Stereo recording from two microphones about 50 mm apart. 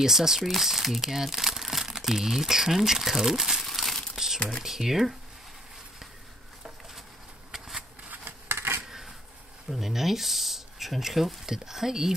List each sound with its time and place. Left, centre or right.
0.0 s speech: centre
4.6 s speech: centre
7.5 s shuffling cards: centre
8.5 s a sound: right
9.7 s speech: centre